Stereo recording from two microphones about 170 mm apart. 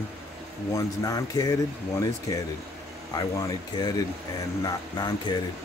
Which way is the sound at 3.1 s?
20° left (ahead or behind).